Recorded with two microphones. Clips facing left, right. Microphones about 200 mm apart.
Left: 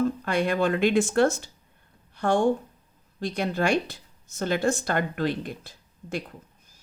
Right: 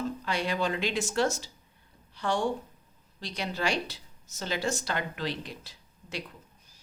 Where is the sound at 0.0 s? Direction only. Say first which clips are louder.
Left 7 dB; 55° left (ahead or behind).